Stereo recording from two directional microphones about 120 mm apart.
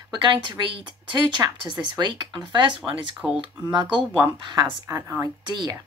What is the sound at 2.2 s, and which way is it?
Speech, 40° right (ahead or behind).